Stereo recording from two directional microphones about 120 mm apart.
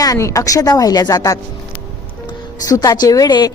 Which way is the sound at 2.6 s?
30° left (ahead or behind).